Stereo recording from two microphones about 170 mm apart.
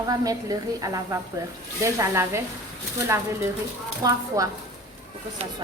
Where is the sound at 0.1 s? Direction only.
20° right (ahead or behind).